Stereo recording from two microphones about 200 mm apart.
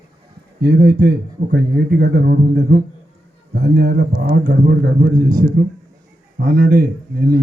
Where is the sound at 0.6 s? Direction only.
55° right (ahead or behind).